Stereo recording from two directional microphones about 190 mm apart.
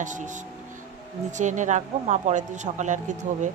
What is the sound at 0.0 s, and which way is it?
Speech, 40° right (ahead or behind).